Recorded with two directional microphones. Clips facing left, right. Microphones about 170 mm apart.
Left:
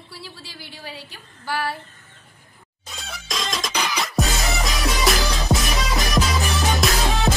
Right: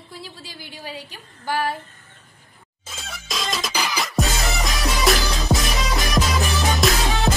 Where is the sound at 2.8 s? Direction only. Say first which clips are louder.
Even; centre (ahead or behind).